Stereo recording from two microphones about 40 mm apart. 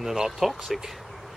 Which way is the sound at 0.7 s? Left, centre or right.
Centre.